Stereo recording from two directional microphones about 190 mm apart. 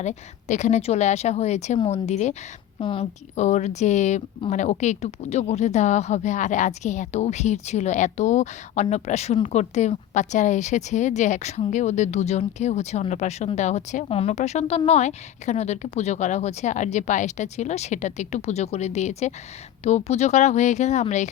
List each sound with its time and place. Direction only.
0.0 s speech: 40° left (ahead or behind)